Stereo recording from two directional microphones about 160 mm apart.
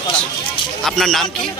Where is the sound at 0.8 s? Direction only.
Centre (ahead or behind).